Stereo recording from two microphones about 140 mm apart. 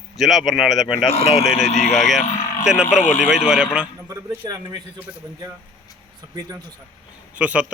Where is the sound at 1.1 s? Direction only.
50° left (ahead or behind).